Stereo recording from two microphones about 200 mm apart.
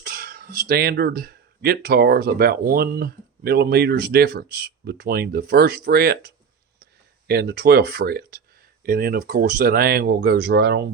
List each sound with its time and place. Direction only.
0.0 s speech: 45° right (ahead or behind)
7.3 s speech: 55° right (ahead or behind)